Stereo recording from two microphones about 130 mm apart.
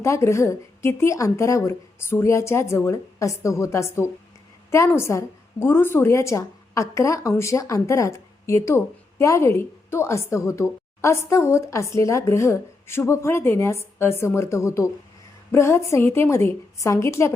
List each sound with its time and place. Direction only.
0.0 s a woman's voice: 20° left (ahead or behind)